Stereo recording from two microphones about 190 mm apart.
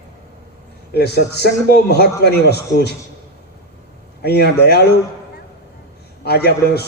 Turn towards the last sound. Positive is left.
turn(degrees=60)  # may be behind; listen again after turning